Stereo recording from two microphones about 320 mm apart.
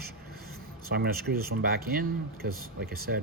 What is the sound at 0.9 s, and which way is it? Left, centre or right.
Speech, right.